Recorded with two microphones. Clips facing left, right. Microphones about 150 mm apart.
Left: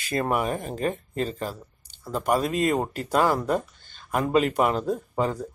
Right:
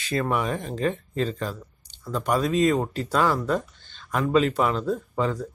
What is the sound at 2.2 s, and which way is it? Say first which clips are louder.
Speech: right 1 dB; 10° left (ahead or behind).